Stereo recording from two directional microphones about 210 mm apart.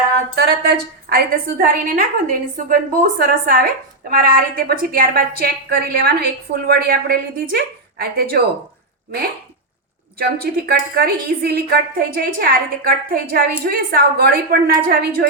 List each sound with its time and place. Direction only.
0.3 s a woman's voice: 45° right (ahead or behind)
10.2 s a woman's voice: 45° right (ahead or behind)